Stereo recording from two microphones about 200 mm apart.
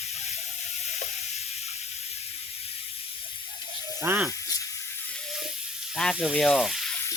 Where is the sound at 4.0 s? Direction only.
10° right (ahead or behind).